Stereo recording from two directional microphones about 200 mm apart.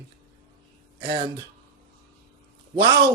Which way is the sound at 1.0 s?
25° right (ahead or behind).